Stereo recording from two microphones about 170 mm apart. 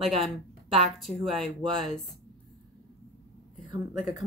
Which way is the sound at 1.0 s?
Centre (ahead or behind).